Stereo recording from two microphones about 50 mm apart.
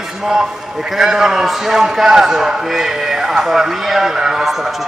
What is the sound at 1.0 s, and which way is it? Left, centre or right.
A man's voice, centre.